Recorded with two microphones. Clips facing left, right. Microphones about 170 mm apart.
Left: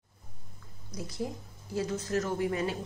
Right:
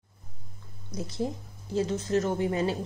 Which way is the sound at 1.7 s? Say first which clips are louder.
Right 4 dB; 25° right (ahead or behind).